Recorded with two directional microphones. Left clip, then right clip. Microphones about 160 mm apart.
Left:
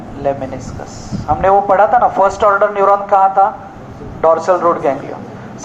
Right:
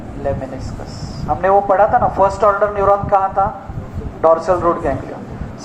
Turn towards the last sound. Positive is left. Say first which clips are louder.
# left 3 dB
turn(degrees=35)  # may be behind; listen again after turning